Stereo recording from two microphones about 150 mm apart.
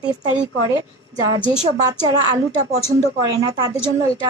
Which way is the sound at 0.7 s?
25° right (ahead or behind).